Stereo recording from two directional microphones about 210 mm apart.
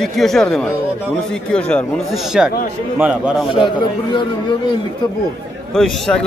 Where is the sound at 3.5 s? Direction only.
20° left (ahead or behind).